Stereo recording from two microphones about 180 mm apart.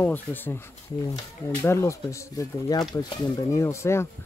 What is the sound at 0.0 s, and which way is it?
Speech, 10° left (ahead or behind).